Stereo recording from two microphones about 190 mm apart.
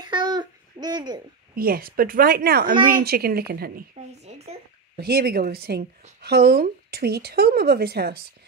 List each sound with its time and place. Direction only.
0.0 s babbling: 20° right (ahead or behind)
1.5 s a woman's voice: 50° right (ahead or behind)
4.3 s speech: 35° right (ahead or behind)
4.9 s speech: 55° right (ahead or behind)